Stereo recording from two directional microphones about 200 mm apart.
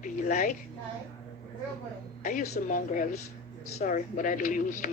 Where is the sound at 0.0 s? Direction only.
40° left (ahead or behind).